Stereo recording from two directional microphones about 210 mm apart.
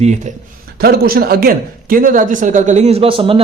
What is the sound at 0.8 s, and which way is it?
A man's voice, 45° right (ahead or behind).